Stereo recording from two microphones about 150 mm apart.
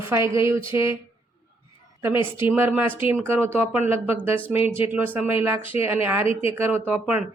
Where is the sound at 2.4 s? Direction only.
15° right (ahead or behind).